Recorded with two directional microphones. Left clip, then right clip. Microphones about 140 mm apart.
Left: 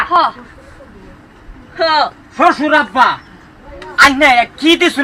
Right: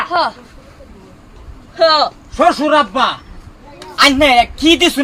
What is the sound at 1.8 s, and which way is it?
A man's voice, 30° right (ahead or behind).